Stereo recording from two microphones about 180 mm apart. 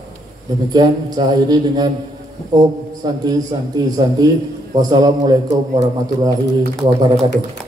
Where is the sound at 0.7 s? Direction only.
20° right (ahead or behind).